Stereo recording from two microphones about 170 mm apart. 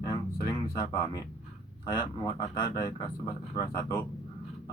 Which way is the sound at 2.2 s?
25° left (ahead or behind).